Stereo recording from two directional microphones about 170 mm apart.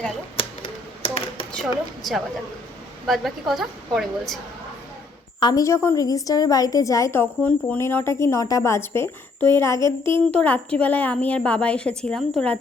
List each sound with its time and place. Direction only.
1.0 s a sound: 35° left (ahead or behind)
1.5 s a woman's voice: centre (ahead or behind)
5.4 s a woman's voice: 25° left (ahead or behind); by 12.5 s 5° left (ahead or behind)